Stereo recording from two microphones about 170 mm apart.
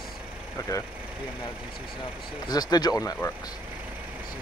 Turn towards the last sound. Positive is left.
turn(degrees=20)  # may be behind; listen again after turning